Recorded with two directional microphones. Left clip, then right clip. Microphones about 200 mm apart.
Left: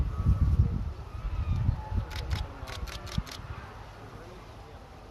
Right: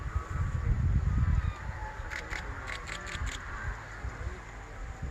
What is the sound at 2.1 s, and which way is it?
Scissors, 50° left (ahead or behind).